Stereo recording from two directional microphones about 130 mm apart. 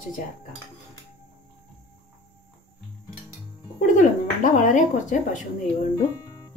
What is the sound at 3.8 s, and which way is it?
Music, 75° left (ahead or behind).